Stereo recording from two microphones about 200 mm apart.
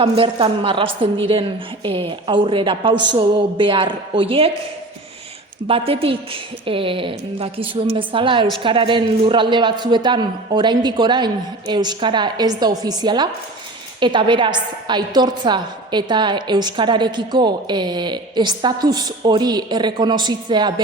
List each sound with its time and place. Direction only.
0.0 s a woman's voice: 25° right (ahead or behind)
5.6 s a woman's voice: 30° right (ahead or behind)